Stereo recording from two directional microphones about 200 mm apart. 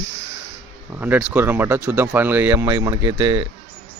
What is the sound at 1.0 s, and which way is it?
Speech, 10° right (ahead or behind).